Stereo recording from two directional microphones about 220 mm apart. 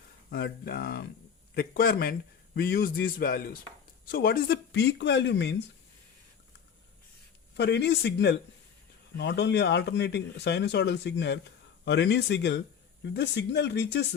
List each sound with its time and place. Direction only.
0.3 s speech: 45° left (ahead or behind)
7.5 s speech: 50° left (ahead or behind)